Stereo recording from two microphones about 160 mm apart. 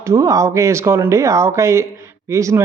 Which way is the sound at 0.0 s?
20° right (ahead or behind).